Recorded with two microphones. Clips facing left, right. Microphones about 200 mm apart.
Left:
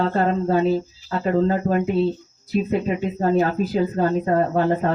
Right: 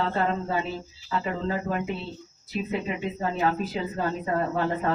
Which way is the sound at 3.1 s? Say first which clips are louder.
Left 7 dB; 45° left (ahead or behind).